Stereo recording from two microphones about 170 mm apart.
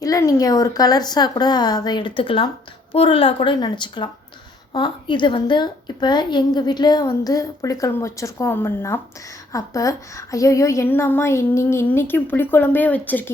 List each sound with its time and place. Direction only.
0.0 s a woman's voice: 20° left (ahead or behind)